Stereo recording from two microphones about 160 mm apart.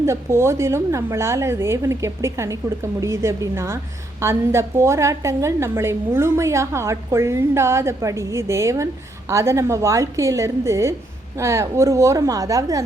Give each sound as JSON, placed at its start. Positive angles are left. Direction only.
{"t": 0.0, "sound": "a woman's voice", "side_deg": -15}